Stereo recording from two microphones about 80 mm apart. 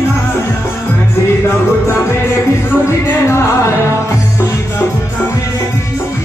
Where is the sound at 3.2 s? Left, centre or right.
Left.